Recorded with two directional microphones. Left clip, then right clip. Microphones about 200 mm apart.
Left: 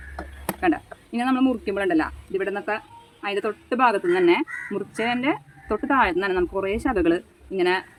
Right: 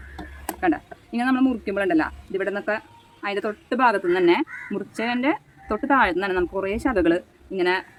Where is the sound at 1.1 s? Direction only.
20° right (ahead or behind).